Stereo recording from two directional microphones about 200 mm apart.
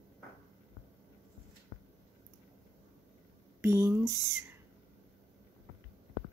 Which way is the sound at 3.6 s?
10° right (ahead or behind).